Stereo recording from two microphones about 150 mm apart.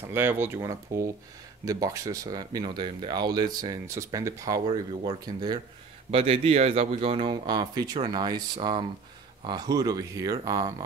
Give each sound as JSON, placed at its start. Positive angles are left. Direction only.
{"t": 0.0, "sound": "speech", "side_deg": -15}
{"t": 6.1, "sound": "speech", "side_deg": -40}